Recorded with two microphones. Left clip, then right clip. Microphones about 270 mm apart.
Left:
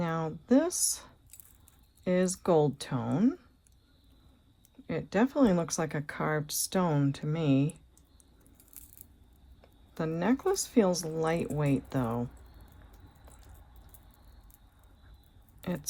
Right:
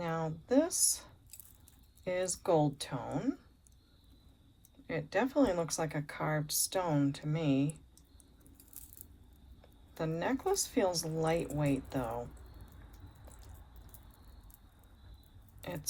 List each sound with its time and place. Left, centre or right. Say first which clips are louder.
0.0 s a sound: left 3 dB; left
2.0 s speech: left 4 dB; left
4.9 s speech: left 3 dB; left
9.6 s speech: left 3 dB; left
15.6 s speech: left 5 dB; left